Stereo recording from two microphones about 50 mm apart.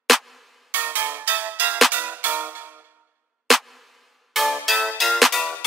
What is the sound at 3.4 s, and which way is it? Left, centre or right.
Music, centre.